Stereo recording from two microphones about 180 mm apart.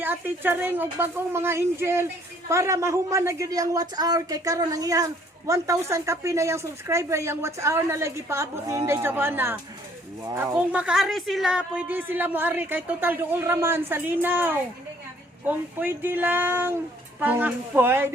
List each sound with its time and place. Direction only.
0.0 s a woman's voice: 10° right (ahead or behind)